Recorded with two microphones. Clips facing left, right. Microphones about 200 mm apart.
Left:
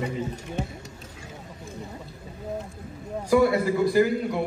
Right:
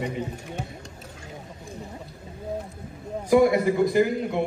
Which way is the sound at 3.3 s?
20° right (ahead or behind).